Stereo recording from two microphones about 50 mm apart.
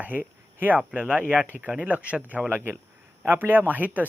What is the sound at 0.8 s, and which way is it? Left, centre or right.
Speech, centre.